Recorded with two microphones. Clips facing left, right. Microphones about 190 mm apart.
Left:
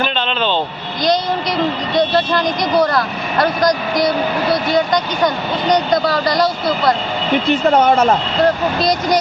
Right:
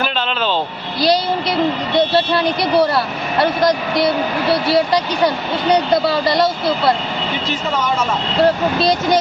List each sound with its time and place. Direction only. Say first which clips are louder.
2.7 s speech: left 1 dB; 30° right (ahead or behind)
6.1 s speech: even; 25° right (ahead or behind)
7.7 s speech: left 7 dB; 60° left (ahead or behind)
8.8 s speech: right 1 dB; 30° right (ahead or behind)